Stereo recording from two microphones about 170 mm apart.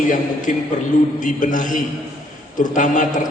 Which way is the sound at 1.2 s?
50° left (ahead or behind).